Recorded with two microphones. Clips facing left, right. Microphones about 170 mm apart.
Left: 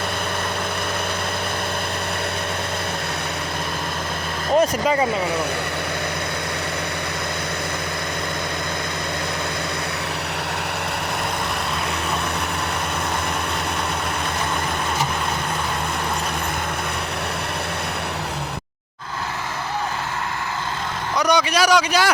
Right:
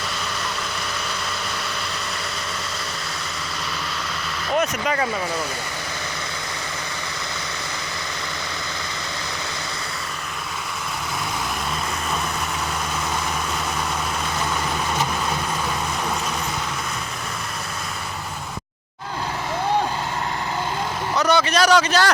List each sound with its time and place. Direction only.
4.5 s speech: 25° left (ahead or behind)
21.2 s a man's voice: 10° left (ahead or behind)